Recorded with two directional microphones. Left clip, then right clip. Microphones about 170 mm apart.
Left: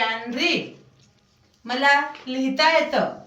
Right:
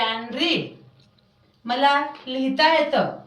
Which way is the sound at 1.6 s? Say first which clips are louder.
Even; 20° right (ahead or behind).